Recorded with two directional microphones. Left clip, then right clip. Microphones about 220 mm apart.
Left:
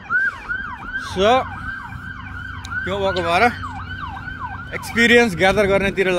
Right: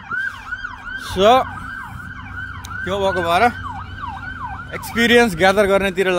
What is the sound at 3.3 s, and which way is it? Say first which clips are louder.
Speech: even; 10° right (ahead or behind).